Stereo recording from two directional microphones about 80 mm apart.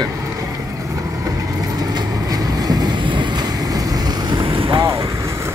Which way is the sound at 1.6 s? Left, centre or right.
Right.